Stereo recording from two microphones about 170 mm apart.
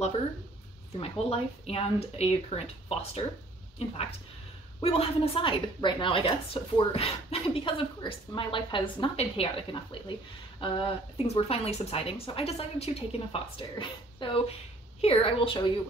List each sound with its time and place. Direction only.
0.9 s a woman's voice: 35° left (ahead or behind)
4.8 s a woman's voice: 35° left (ahead or behind)